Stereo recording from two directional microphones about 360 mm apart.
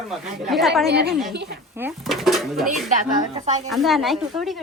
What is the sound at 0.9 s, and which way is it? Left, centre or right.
Speech, right.